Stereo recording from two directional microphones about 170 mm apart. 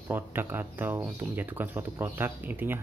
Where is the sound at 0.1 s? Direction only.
10° right (ahead or behind).